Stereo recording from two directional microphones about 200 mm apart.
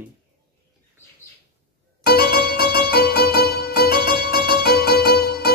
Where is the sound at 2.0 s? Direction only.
50° left (ahead or behind).